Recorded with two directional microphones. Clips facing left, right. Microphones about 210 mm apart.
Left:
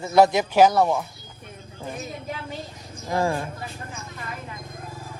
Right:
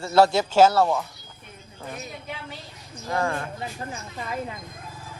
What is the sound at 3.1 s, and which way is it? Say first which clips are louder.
Speech: left 2 dB; 30° left (ahead or behind).